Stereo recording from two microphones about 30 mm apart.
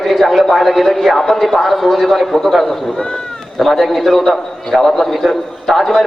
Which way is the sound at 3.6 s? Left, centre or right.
Centre.